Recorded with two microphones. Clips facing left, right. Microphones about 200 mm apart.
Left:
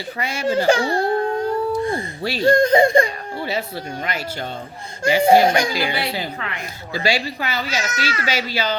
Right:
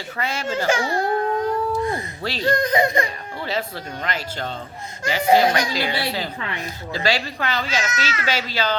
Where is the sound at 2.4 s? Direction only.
30° left (ahead or behind).